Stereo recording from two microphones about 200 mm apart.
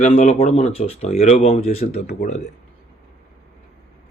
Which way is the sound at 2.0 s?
45° left (ahead or behind).